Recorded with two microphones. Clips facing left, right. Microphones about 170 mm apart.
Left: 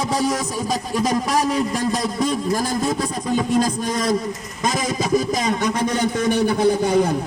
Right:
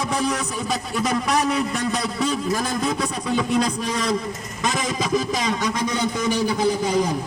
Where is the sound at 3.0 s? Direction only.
45° left (ahead or behind).